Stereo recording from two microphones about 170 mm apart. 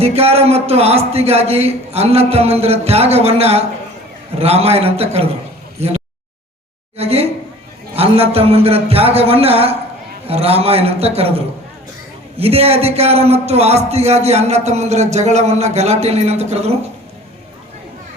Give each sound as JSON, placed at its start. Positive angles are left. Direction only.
{"t": 0.0, "sound": "a man's voice", "side_deg": -35}
{"t": 6.9, "sound": "a sound", "side_deg": -35}
{"t": 7.9, "sound": "a man's voice", "side_deg": -35}